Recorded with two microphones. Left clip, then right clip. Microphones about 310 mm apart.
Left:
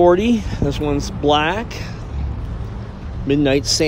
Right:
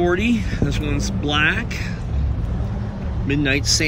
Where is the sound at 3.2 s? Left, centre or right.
Centre.